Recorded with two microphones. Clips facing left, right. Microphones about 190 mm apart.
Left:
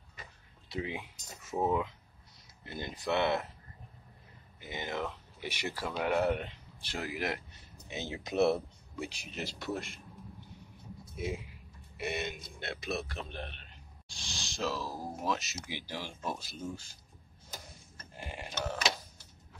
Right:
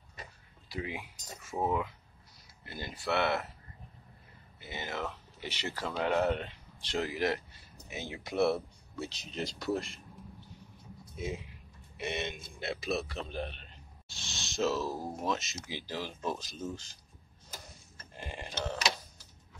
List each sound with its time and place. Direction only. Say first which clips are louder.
0.7 s speech: left 1 dB; 20° left (ahead or behind)
2.6 s speech: left 1 dB; 20° left (ahead or behind)
4.6 s speech: left 1 dB; 15° left (ahead or behind); by 10.0 s centre (ahead or behind)
11.1 s a man's voice: left 1 dB; 10° left (ahead or behind)
15.7 s speech: right 3 dB; 10° left (ahead or behind)
18.1 s a sound: right 1 dB; 10° left (ahead or behind)